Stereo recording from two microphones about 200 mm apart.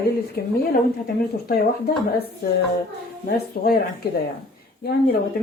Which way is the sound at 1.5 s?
50° left (ahead or behind).